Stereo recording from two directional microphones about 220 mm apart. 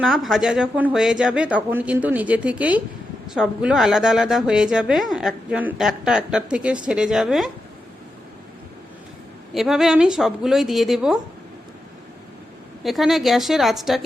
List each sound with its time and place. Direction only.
0.0 s a woman's voice: centre (ahead or behind)
9.6 s a woman's voice: centre (ahead or behind)
12.8 s a woman's voice: centre (ahead or behind)